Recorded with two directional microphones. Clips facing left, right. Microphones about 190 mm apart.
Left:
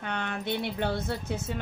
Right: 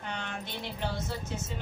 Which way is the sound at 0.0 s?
60° left (ahead or behind).